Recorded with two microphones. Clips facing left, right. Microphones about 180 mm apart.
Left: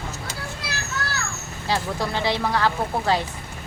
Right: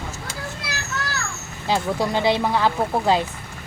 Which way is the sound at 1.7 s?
15° right (ahead or behind).